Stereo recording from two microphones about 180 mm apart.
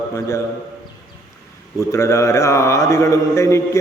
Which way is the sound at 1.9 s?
15° left (ahead or behind).